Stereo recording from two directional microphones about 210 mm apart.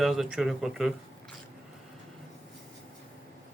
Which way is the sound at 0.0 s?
Centre (ahead or behind).